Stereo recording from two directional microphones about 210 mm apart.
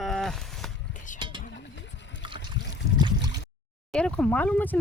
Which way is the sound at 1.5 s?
55° left (ahead or behind).